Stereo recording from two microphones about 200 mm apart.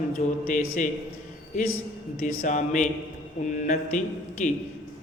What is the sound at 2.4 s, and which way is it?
A man's voice, 40° left (ahead or behind).